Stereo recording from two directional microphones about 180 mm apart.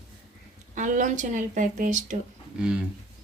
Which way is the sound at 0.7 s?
45° right (ahead or behind).